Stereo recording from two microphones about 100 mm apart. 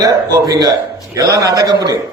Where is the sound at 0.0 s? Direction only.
35° right (ahead or behind).